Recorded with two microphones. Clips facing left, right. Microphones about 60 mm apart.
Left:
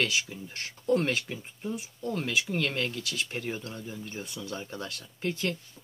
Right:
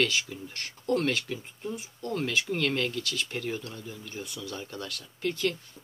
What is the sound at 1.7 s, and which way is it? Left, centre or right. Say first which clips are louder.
Speech: even; centre.